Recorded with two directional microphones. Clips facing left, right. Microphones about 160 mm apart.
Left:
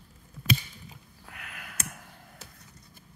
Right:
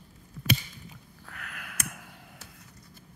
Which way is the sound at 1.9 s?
5° right (ahead or behind).